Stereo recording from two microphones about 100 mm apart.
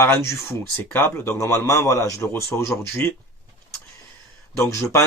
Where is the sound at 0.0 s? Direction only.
25° left (ahead or behind).